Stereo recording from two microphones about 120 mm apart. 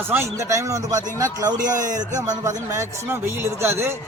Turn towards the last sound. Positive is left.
turn(degrees=-20)  # may be behind; listen again after turning